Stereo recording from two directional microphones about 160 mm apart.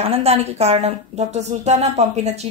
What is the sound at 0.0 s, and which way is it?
A woman's voice, 40° right (ahead or behind).